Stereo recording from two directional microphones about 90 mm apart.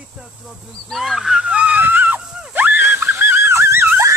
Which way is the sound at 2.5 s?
20° right (ahead or behind).